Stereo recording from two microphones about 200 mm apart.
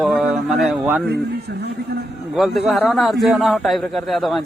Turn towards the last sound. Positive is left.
turn(degrees=0)  # may be behind; listen again after turning